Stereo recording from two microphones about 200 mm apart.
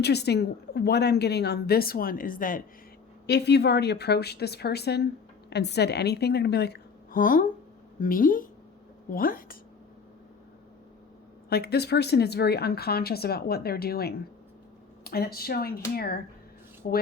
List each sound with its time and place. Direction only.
0.0 s a woman's voice: 55° left (ahead or behind)
3.2 s a woman's voice: 55° left (ahead or behind)
11.4 s a woman's voice: 50° left (ahead or behind)